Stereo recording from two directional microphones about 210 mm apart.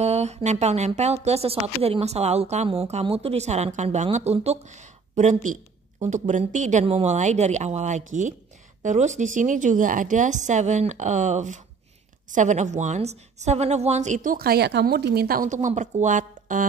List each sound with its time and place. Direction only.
0.0 s speech: 30° right (ahead or behind)